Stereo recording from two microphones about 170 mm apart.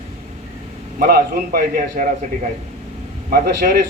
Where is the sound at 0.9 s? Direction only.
60° right (ahead or behind).